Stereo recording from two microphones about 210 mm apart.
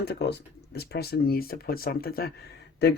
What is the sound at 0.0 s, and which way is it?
Speech, 50° left (ahead or behind).